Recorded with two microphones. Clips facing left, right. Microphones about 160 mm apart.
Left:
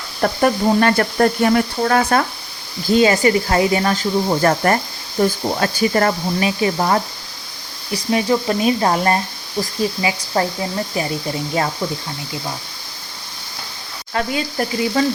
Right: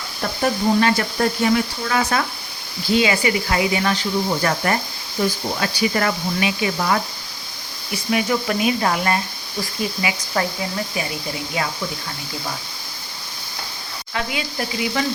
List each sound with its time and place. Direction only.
0.2 s speech: 50° left (ahead or behind); by 11.0 s 35° left (ahead or behind)
14.1 s speech: 40° left (ahead or behind)